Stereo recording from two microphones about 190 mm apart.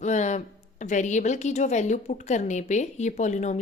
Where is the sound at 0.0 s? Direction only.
40° left (ahead or behind).